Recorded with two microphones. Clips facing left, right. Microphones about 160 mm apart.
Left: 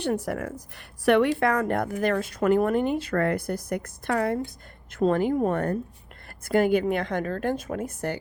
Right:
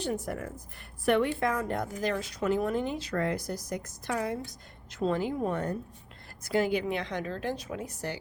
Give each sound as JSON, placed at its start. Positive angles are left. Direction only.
{"t": 0.0, "sound": "a woman's voice", "side_deg": 70}